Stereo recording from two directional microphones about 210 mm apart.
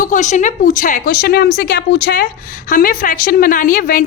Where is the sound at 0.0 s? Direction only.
35° left (ahead or behind).